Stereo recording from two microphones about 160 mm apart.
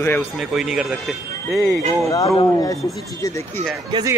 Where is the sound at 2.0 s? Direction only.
20° left (ahead or behind).